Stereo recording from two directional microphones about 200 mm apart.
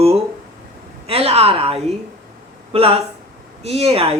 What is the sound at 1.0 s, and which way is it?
A woman's voice, 30° right (ahead or behind).